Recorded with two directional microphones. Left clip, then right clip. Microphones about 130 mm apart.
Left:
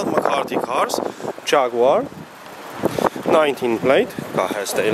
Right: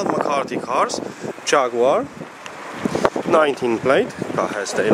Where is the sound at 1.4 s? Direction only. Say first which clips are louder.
Left 1 dB; centre (ahead or behind).